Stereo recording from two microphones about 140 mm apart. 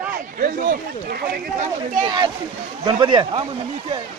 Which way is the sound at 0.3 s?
80° right.